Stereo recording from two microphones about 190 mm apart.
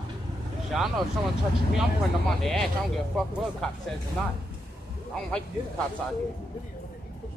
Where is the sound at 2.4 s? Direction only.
Centre (ahead or behind).